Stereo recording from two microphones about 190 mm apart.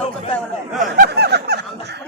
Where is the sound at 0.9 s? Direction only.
60° right (ahead or behind).